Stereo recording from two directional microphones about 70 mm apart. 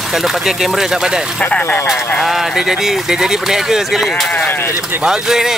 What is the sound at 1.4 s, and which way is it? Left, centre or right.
Speech, left.